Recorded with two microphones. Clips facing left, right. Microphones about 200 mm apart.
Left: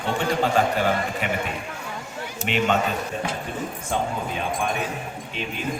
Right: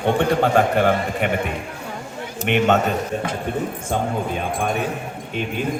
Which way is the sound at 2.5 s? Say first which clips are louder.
Right 5 dB; 55° right (ahead or behind).